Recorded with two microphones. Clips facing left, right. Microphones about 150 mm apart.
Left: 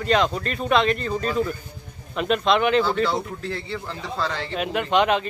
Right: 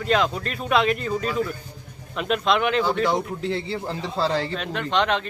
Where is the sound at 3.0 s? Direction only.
20° right (ahead or behind); by 4.5 s 35° right (ahead or behind).